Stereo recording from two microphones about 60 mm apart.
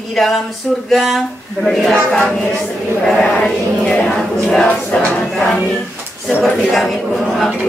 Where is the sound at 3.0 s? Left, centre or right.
Centre.